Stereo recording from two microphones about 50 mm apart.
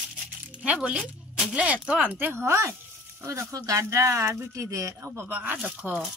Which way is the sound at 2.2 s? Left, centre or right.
Right.